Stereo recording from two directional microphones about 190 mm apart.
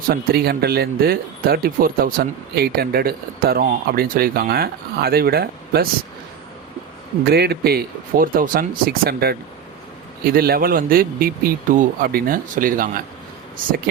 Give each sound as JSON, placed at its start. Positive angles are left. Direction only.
{"t": 0.1, "sound": "speech", "side_deg": -55}
{"t": 7.3, "sound": "speech", "side_deg": -55}